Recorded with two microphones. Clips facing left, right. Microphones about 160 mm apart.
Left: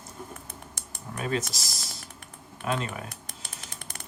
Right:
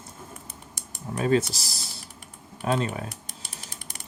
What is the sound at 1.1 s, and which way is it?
Speech, 30° right (ahead or behind).